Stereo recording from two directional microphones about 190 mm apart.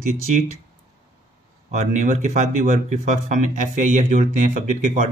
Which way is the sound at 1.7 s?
40° right (ahead or behind).